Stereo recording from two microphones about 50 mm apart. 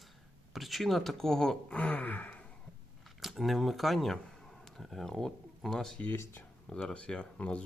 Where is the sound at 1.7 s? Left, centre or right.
Left.